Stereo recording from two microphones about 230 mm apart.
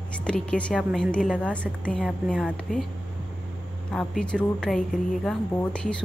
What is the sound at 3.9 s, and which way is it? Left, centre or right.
A woman's voice, centre.